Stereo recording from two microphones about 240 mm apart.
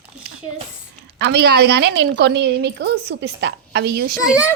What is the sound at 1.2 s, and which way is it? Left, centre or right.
A woman's voice, right.